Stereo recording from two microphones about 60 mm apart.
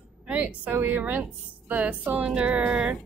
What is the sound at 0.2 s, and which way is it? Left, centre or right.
A woman's voice, right.